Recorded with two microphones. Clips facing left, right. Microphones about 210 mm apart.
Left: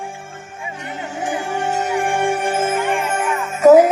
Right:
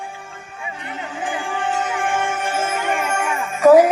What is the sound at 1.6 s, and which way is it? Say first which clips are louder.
Music: left 2 dB; 40° left (ahead or behind).